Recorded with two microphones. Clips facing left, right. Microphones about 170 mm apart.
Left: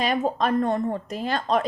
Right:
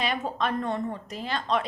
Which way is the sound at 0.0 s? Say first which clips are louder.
Left 5 dB; 40° left (ahead or behind).